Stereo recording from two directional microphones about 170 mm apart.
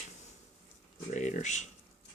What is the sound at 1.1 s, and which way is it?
Speech, 45° left (ahead or behind).